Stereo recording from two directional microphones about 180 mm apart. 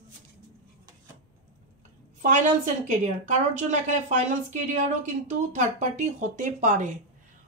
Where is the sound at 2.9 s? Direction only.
40° right (ahead or behind).